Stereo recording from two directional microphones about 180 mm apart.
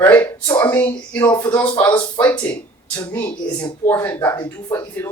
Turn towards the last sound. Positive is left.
turn(degrees=15)  # may be behind; listen again after turning